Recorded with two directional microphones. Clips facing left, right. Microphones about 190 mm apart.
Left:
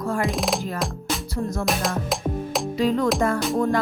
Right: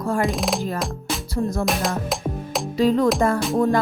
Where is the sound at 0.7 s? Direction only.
Centre (ahead or behind).